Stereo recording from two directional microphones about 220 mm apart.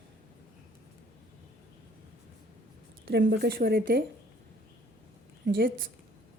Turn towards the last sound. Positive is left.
turn(degrees=-40)  # may be behind; listen again after turning